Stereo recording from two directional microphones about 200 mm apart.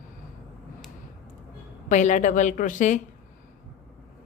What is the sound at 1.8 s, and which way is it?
Speech, 40° left (ahead or behind).